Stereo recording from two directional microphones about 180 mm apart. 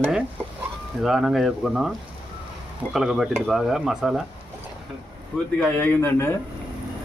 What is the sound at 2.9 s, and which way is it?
Stir, centre (ahead or behind).